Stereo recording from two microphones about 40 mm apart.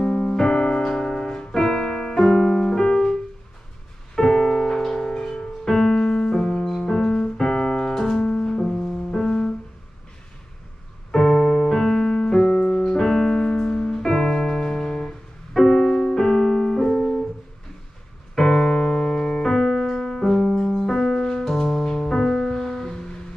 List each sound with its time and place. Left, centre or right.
0.0 s piano: centre
4.1 s music: centre
7.9 s piano: centre
8.5 s music: centre
11.1 s music: centre
12.9 s music: centre
15.8 s music: left
16.2 s piano: centre
18.3 s piano: centre